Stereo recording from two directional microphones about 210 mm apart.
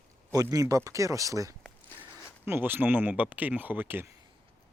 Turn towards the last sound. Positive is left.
turn(degrees=-10)  # may be behind; listen again after turning